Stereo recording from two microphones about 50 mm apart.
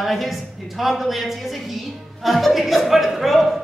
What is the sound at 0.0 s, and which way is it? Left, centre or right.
Speech, centre.